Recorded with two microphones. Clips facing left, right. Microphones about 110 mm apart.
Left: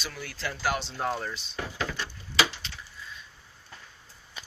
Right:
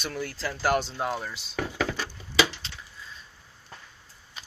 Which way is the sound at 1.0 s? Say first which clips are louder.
Even; 10° right (ahead or behind).